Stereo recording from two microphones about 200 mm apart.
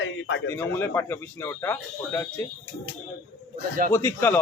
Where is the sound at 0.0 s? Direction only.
65° left (ahead or behind).